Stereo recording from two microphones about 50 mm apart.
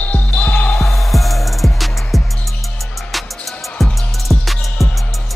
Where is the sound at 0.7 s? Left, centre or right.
Centre.